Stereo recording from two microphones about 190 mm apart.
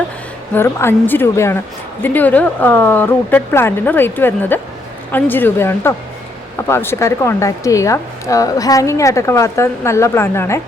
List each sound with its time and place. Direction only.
0.5 s a woman's voice: 15° left (ahead or behind)